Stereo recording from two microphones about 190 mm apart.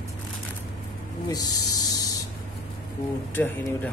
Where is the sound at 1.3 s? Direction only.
20° left (ahead or behind).